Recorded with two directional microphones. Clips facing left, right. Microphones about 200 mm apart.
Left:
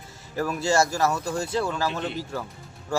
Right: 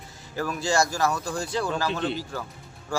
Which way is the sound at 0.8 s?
25° left (ahead or behind).